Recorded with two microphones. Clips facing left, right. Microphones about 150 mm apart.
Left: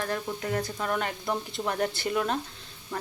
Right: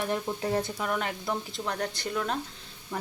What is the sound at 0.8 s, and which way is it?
Frying, centre (ahead or behind).